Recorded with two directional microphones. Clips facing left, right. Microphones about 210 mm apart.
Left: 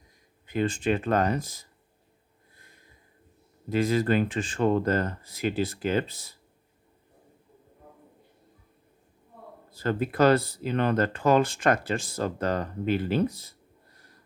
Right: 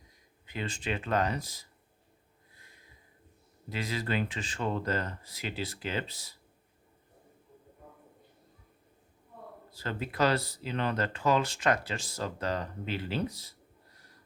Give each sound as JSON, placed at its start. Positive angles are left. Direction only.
{"t": 0.4, "sound": "speech", "side_deg": 50}
{"t": 3.7, "sound": "speech", "side_deg": 50}
{"t": 9.7, "sound": "speech", "side_deg": 50}